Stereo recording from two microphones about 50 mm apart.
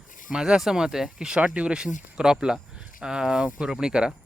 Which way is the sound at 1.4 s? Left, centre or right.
Right.